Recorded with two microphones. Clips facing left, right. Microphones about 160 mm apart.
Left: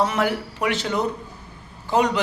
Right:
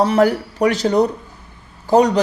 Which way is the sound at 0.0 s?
35° right (ahead or behind).